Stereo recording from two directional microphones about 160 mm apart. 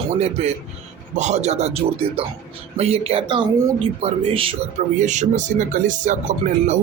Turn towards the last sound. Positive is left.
turn(degrees=-50)  # may be behind; listen again after turning